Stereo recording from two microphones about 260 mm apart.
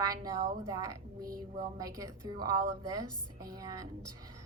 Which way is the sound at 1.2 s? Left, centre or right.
Right.